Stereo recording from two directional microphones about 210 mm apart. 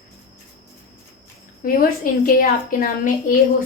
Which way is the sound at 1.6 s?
40° left (ahead or behind).